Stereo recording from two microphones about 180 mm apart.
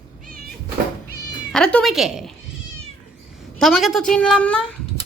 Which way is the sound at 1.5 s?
5° left (ahead or behind).